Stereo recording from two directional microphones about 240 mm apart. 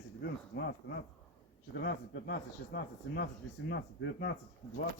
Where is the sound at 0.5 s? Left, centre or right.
Left.